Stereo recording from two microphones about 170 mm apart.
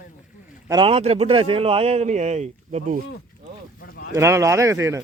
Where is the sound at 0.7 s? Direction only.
30° right (ahead or behind); by 3.0 s 45° right (ahead or behind).